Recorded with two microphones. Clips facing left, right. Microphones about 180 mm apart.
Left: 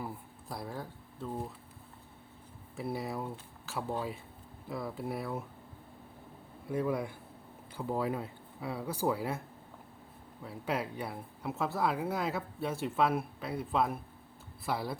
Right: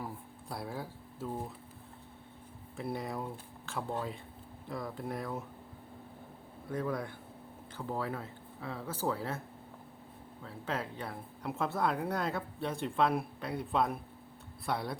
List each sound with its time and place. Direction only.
0.0 s speech: centre (ahead or behind)
2.7 s speech: 5° left (ahead or behind)
6.7 s speech: 10° left (ahead or behind)
10.4 s speech: 10° left (ahead or behind)